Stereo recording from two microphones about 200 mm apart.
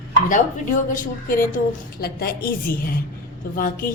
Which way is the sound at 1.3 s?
45° left (ahead or behind).